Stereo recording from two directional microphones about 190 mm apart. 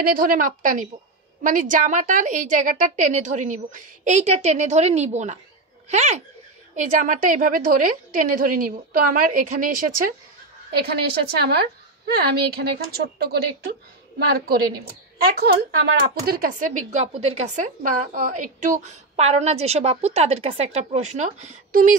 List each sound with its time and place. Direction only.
0.0 s a woman's voice: 45° right (ahead or behind)
10.7 s a woman's voice: 55° right (ahead or behind); by 21.9 s 40° right (ahead or behind)